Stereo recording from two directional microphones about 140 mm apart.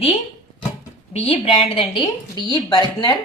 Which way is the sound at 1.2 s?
40° left (ahead or behind).